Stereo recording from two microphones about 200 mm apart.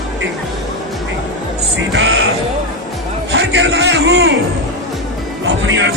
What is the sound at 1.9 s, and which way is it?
Music, 65° right (ahead or behind).